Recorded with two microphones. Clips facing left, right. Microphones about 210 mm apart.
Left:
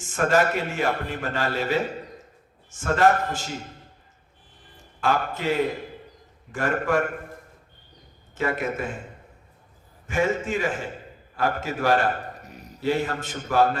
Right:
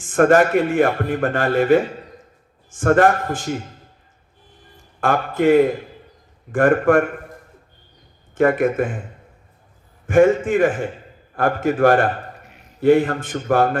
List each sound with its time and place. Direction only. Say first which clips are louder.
0.1 s a man's voice: right 8 dB; 55° right (ahead or behind)
4.9 s a man's voice: right 6 dB; 55° right (ahead or behind)
8.4 s a man's voice: right 10 dB; 55° right (ahead or behind)
10.1 s a man's voice: right 10 dB; 55° right (ahead or behind)
12.5 s a sound: left 6 dB; 40° left (ahead or behind)
12.8 s a man's voice: right 10 dB; 55° right (ahead or behind)